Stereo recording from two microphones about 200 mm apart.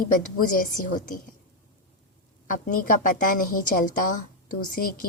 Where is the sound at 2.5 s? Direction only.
40° left (ahead or behind).